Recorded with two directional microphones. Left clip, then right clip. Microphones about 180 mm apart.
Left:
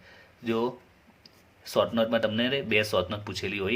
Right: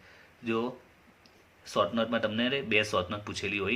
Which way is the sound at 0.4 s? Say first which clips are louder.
Left 3 dB; 35° left (ahead or behind).